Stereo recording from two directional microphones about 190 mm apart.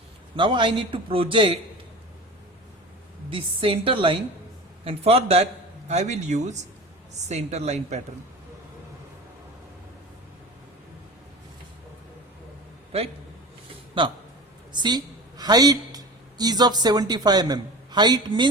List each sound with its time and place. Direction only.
0.3 s a man's voice: 25° right (ahead or behind)
3.2 s a man's voice: 30° right (ahead or behind)
14.0 s a man's voice: 25° right (ahead or behind)